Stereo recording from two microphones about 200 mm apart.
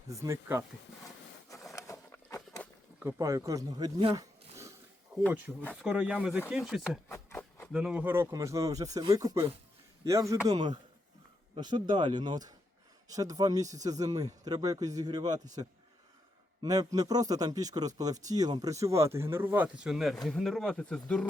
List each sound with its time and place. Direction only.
0.1 s a man's voice: 15° right (ahead or behind)
1.5 s a sound: 15° left (ahead or behind)
3.0 s a man's voice: 15° right (ahead or behind)
5.7 s speech: 5° right (ahead or behind)
7.1 s a sound: 10° left (ahead or behind)
7.7 s a man's voice: 5° right (ahead or behind)
16.6 s a man's voice: 20° right (ahead or behind); by 21.2 s 5° left (ahead or behind)